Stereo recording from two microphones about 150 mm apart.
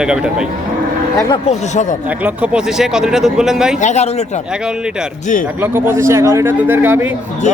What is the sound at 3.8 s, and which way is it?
Speech, 50° left (ahead or behind).